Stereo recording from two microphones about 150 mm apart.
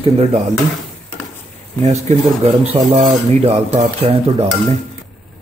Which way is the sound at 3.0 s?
45° right (ahead or behind).